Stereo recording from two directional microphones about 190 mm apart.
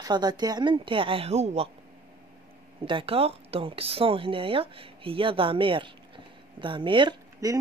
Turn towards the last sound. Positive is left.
turn(degrees=-20)  # may be behind; listen again after turning